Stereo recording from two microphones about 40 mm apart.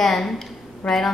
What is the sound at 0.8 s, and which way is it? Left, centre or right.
Speech, left.